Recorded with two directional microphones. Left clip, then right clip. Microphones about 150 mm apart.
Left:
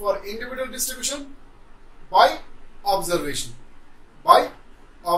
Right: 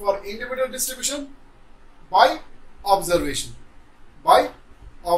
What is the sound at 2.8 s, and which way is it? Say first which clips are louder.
Speech: right 3 dB; 30° right (ahead or behind).